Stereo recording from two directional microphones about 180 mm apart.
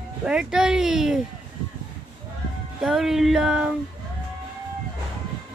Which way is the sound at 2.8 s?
5° right (ahead or behind).